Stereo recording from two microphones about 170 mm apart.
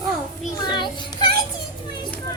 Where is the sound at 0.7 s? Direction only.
25° left (ahead or behind).